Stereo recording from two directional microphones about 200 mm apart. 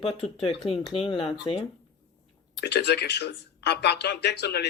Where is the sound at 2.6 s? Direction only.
55° left (ahead or behind).